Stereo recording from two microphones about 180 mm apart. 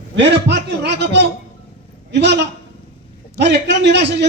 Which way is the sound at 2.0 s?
70° right (ahead or behind).